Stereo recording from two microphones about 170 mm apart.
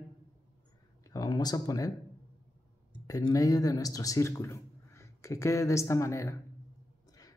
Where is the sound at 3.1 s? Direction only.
20° left (ahead or behind).